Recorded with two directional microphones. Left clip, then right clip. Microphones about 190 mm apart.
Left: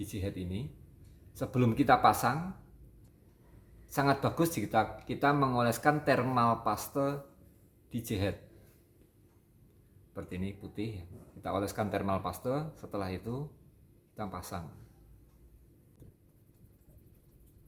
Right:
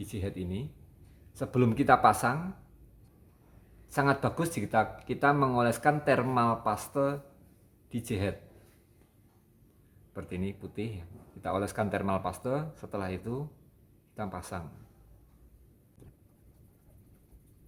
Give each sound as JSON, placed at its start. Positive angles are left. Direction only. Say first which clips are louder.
{"t": 0.0, "sound": "speech", "louder": "right 1 dB", "side_deg": -35}
{"t": 3.8, "sound": "speech", "louder": "right 2 dB", "side_deg": -40}
{"t": 10.2, "sound": "speech", "louder": "right 3 dB", "side_deg": -40}